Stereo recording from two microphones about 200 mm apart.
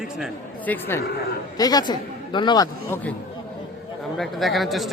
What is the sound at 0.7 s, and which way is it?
A man's voice, 10° left (ahead or behind).